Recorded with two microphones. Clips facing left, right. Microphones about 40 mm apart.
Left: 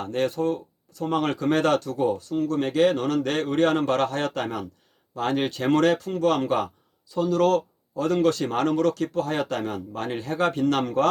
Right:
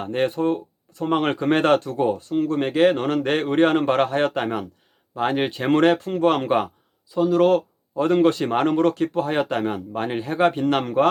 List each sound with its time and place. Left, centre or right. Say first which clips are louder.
0.0 s speech: right 3 dB; right